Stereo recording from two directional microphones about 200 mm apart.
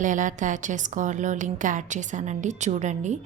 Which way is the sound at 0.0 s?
40° right (ahead or behind).